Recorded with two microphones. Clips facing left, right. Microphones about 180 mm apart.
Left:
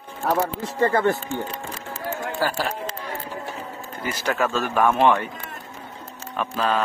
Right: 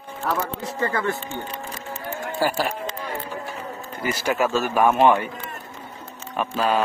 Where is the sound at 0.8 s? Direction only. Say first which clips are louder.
Left 5 dB; 35° left (ahead or behind).